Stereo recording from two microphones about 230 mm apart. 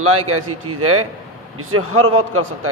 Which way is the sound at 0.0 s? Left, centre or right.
Right.